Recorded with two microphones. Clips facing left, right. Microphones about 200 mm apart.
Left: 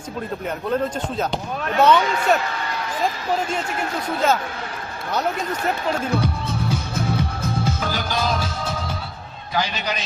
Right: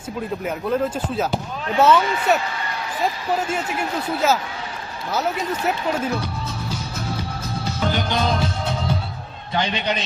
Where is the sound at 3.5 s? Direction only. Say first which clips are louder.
Right 1 dB; 5° right (ahead or behind).